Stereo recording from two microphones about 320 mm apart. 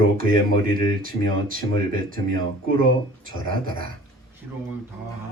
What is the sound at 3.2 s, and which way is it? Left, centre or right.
Speech, right.